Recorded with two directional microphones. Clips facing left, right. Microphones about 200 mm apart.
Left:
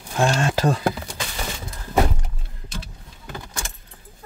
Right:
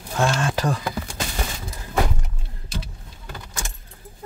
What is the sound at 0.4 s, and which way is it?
Speech, 25° left (ahead or behind).